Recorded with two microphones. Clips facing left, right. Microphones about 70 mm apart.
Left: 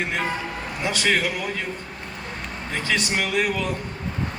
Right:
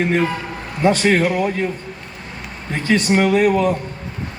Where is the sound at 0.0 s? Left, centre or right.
Right.